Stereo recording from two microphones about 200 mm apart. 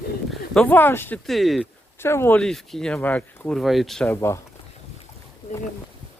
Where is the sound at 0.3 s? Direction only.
5° left (ahead or behind).